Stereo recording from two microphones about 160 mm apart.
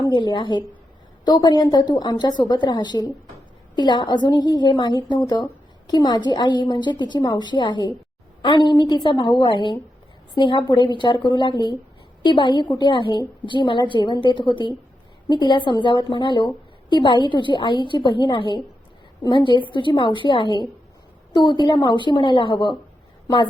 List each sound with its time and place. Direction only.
0.1 s a woman's voice: 30° left (ahead or behind)